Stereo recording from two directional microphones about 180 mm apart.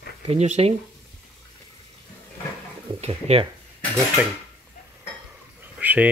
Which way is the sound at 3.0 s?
30° right (ahead or behind).